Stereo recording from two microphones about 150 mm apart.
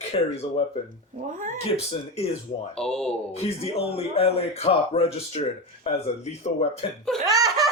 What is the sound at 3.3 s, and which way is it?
Speech, 40° left (ahead or behind).